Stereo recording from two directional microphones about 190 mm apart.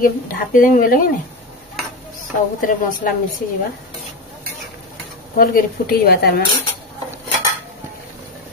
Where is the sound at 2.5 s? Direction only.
45° left (ahead or behind).